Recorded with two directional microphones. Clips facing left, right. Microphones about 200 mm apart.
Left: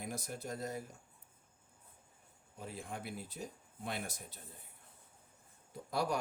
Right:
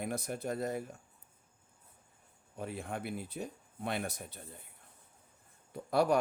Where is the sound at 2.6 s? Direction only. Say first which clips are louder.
Right 6 dB; 60° right (ahead or behind).